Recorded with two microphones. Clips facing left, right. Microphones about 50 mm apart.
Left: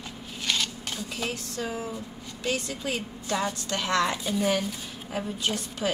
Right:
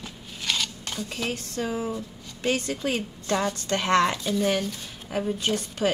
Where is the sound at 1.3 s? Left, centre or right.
Right.